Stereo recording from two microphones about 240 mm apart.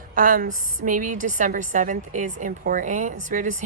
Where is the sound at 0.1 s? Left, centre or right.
Right.